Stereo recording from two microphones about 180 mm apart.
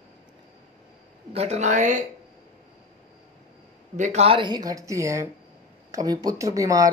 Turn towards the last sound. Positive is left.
turn(degrees=-20)  # may be behind; listen again after turning